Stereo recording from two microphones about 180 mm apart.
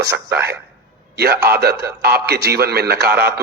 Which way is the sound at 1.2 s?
60° right (ahead or behind).